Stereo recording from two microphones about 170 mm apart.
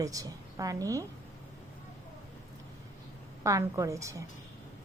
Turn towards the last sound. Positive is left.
turn(degrees=-20)  # may be behind; listen again after turning